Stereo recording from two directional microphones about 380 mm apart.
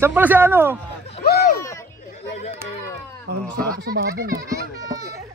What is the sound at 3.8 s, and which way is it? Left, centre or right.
Speech, right.